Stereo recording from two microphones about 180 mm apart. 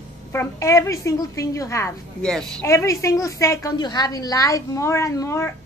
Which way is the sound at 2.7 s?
15° left (ahead or behind).